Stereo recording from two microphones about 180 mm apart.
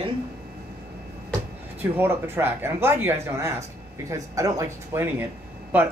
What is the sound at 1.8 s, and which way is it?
Speech, 10° right (ahead or behind).